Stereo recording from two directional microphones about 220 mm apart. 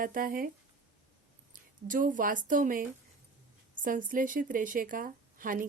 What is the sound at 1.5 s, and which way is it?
Speech, 35° right (ahead or behind).